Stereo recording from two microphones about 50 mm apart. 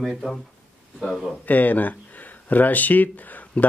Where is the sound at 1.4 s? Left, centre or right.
Left.